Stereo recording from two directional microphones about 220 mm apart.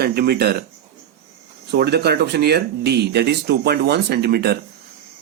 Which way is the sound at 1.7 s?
45° right (ahead or behind).